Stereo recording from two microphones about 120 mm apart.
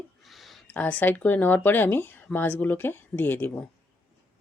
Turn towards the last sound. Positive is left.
turn(degrees=15)  # may be behind; listen again after turning